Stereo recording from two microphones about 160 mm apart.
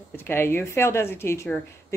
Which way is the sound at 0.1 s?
15° left (ahead or behind).